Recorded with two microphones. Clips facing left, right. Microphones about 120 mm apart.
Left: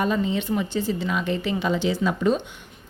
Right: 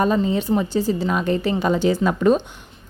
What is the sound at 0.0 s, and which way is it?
A woman's voice, 40° right (ahead or behind).